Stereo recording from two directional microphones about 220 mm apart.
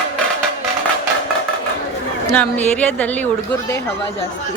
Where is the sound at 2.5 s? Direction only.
5° left (ahead or behind).